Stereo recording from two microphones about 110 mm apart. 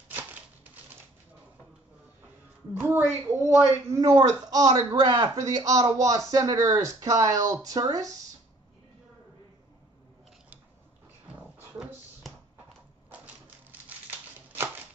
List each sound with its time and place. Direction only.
2.7 s a woman's voice: 20° right (ahead or behind)